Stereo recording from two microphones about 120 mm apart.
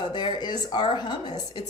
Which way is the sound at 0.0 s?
40° left (ahead or behind).